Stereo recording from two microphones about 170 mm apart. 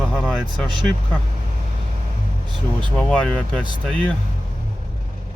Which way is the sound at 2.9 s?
5° left (ahead or behind).